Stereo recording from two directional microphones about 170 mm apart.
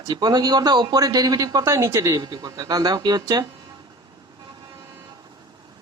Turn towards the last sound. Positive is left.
turn(degrees=-25)  # may be behind; listen again after turning